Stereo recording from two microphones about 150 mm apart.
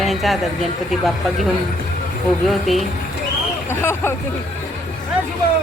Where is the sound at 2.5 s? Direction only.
Centre (ahead or behind).